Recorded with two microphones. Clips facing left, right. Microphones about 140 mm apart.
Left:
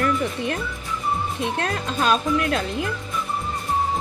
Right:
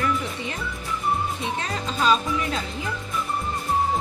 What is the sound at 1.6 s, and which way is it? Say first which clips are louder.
Speech: left 1 dB; 60° left (ahead or behind).